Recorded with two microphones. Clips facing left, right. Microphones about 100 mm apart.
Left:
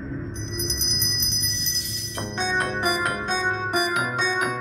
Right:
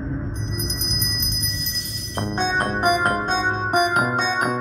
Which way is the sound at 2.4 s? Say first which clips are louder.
Right 3 dB; 50° right (ahead or behind).